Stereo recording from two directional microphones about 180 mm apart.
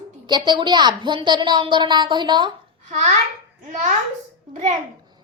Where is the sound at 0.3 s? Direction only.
25° right (ahead or behind).